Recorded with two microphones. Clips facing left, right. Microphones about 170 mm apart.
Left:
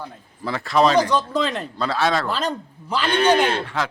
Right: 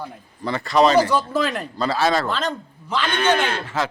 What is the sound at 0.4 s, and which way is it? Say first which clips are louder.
Speech: right 1 dB; centre (ahead or behind).